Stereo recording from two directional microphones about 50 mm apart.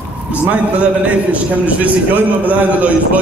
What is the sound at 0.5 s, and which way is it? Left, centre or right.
A man's voice, right.